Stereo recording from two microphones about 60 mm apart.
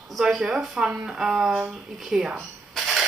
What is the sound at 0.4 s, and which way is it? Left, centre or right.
Speech, centre.